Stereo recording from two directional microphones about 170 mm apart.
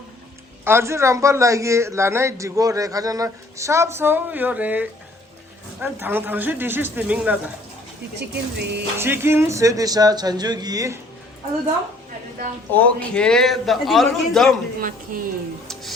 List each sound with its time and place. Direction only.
0.6 s a man's voice: 15° right (ahead or behind)
8.2 s a sound: 80° right
9.0 s speech: 15° right (ahead or behind)
12.7 s a man's voice: 10° left (ahead or behind)
14.8 s a woman's voice: 55° right (ahead or behind)
15.6 s music: centre (ahead or behind)